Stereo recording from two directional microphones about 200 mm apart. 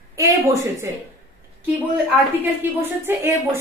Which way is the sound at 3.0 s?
10° right (ahead or behind).